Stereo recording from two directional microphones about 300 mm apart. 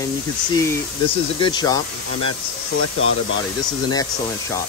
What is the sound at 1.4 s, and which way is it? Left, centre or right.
Speech, centre.